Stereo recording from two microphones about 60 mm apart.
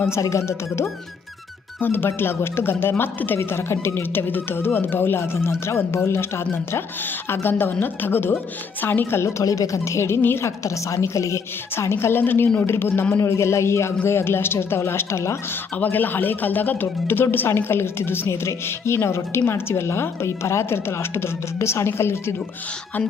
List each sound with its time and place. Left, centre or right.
0.2 s a woman's voice: left
1.8 s speech: left
3.0 s speech: left
3.3 s speech: left
9.4 s a woman's voice: left
11.8 s speech: left
15.8 s speech: left